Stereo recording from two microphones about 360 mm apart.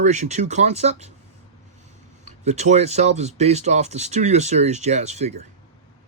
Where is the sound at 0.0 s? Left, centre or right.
Centre.